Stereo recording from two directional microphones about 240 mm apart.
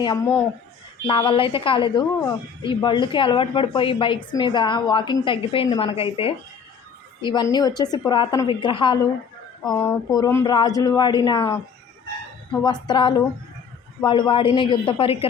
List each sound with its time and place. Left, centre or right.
0.0 s a woman's voice: centre
9.6 s speech: centre
12.6 s a woman's voice: centre